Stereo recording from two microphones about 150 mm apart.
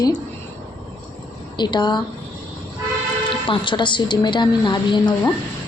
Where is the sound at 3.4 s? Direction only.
35° left (ahead or behind).